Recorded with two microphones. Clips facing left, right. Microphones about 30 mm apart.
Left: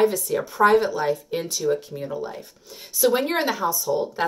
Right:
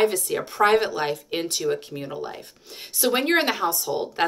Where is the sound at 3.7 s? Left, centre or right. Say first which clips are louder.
Left 3 dB; right.